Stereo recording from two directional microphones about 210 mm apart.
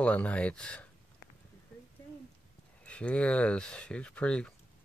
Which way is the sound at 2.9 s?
5° left (ahead or behind).